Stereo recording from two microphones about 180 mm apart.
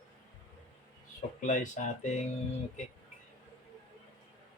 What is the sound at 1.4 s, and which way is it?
Speech, 45° left (ahead or behind).